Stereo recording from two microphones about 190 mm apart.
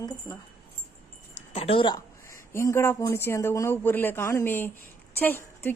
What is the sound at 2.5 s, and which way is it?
A woman's voice, 15° left (ahead or behind).